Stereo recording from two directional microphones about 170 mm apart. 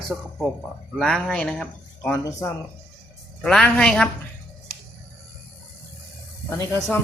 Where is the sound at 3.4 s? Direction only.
5° left (ahead or behind).